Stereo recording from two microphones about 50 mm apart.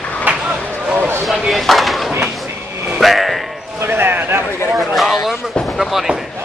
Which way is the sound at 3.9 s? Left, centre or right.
Right.